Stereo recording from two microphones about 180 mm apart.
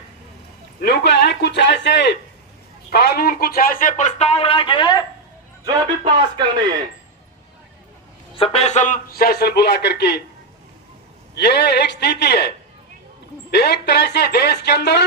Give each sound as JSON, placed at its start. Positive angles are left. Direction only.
{"t": 0.8, "sound": "a man's voice", "side_deg": 65}
{"t": 5.6, "sound": "speech", "side_deg": -25}
{"t": 8.4, "sound": "a man's voice", "side_deg": 35}
{"t": 11.3, "sound": "a man's voice", "side_deg": 65}